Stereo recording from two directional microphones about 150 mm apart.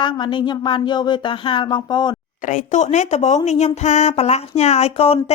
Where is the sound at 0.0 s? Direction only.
30° left (ahead or behind).